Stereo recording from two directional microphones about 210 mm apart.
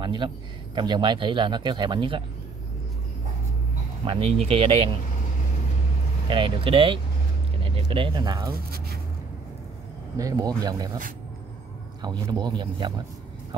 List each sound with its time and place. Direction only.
0.0 s a man's voice: 20° right (ahead or behind)
4.0 s speech: 25° right (ahead or behind)
6.2 s speech: 25° right (ahead or behind)
8.7 s a sound: 45° right (ahead or behind)
10.1 s speech: 15° right (ahead or behind)
12.0 s speech: 20° right (ahead or behind)